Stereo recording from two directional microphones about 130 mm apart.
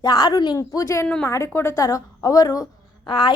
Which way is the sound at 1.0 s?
10° left (ahead or behind).